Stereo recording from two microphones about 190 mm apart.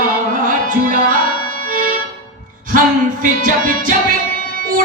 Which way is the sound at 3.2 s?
45° right (ahead or behind).